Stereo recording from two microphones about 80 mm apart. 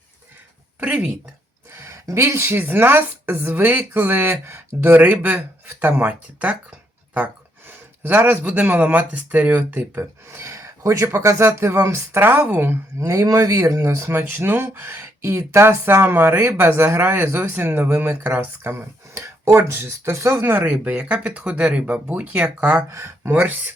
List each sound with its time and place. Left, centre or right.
0.8 s speech: right
1.7 s speech: right
13.0 s speech: right